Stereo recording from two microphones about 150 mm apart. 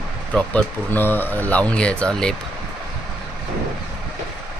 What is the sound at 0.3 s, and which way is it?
Speech, 10° left (ahead or behind).